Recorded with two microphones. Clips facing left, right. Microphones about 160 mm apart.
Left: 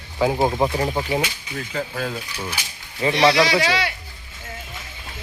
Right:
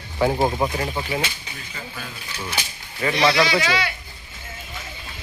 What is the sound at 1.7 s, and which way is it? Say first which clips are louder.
Speech: left 10 dB; 80° left.